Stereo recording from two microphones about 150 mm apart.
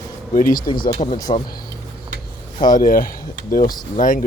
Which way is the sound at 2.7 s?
70° left (ahead or behind).